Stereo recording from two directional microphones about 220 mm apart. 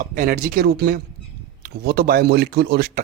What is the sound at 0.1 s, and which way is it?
Speech, 40° right (ahead or behind).